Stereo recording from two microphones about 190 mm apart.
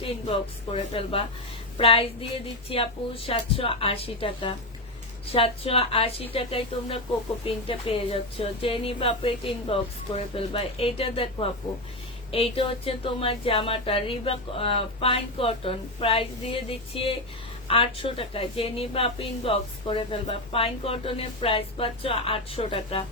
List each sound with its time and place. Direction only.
0.0 s a woman's voice: 30° left (ahead or behind)